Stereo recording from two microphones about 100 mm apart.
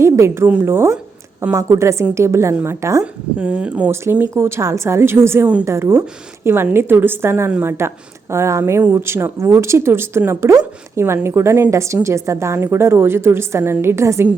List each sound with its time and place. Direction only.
0.0 s a woman's voice: 25° right (ahead or behind)
3.0 s speech: 10° right (ahead or behind)
4.0 s a woman's voice: 25° right (ahead or behind)